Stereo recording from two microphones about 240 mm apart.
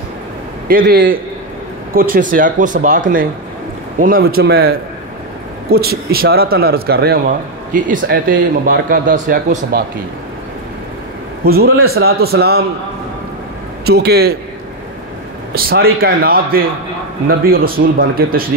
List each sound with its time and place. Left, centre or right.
0.7 s speech: right
4.0 s speech: right
11.4 s speech: right
13.8 s speech: right
15.5 s speech: right